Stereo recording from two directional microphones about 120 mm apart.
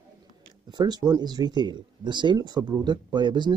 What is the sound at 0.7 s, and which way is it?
Speech, 35° right (ahead or behind).